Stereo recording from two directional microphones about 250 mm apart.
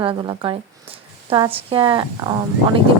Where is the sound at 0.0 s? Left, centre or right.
Centre.